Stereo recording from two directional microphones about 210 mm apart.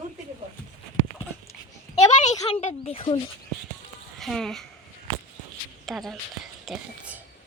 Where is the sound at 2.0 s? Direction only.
35° left (ahead or behind).